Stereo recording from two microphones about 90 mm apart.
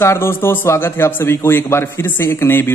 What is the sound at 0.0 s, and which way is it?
A man's voice, 30° left (ahead or behind).